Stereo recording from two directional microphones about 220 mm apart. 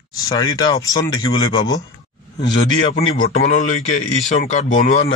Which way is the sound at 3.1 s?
35° left (ahead or behind).